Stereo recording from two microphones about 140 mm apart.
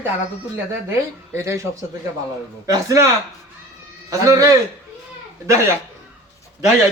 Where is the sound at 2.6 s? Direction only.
20° right (ahead or behind).